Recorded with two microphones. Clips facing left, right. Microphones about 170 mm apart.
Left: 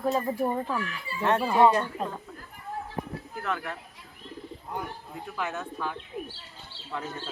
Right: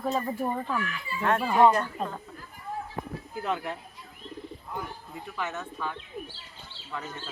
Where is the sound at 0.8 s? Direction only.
30° left (ahead or behind).